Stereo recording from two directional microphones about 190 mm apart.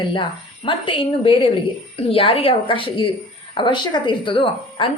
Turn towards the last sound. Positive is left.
turn(degrees=25)  # may be behind; listen again after turning